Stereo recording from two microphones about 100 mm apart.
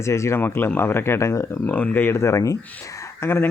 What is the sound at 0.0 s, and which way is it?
Speech, 30° left (ahead or behind).